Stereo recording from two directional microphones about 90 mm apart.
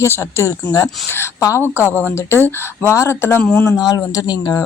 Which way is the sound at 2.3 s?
25° left (ahead or behind).